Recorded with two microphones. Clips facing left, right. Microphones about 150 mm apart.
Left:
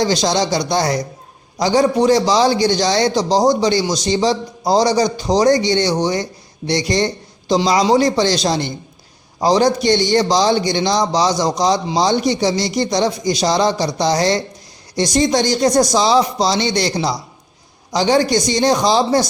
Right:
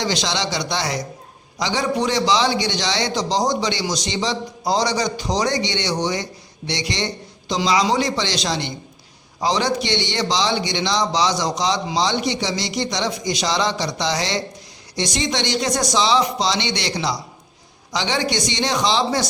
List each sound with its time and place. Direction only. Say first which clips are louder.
0.0 s a man's voice: left 7 dB; 40° left (ahead or behind)